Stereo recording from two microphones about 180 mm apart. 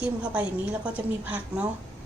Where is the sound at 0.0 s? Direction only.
10° right (ahead or behind).